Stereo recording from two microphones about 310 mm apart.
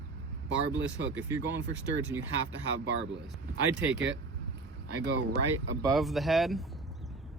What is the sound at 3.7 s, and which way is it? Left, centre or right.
Speech, right.